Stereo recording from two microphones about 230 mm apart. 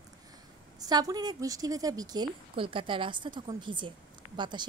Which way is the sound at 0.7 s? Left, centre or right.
Centre.